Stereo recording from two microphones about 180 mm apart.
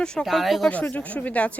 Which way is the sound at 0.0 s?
5° left (ahead or behind).